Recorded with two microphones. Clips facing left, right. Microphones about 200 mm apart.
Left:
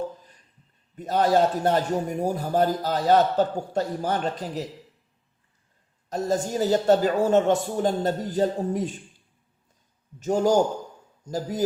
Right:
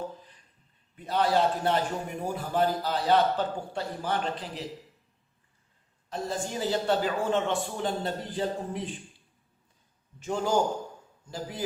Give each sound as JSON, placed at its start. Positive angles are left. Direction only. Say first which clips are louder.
{"t": 0.9, "sound": "a man's voice", "louder": "left 5 dB", "side_deg": 45}
{"t": 6.1, "sound": "a man's voice", "louder": "left 7 dB", "side_deg": 45}
{"t": 10.2, "sound": "a man's voice", "louder": "left 6 dB", "side_deg": 40}